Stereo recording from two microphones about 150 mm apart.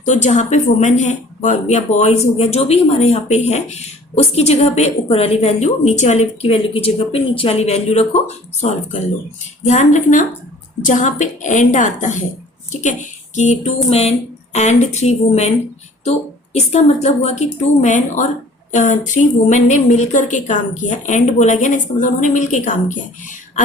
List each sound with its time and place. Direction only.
0.0 s a woman's voice: 50° left (ahead or behind)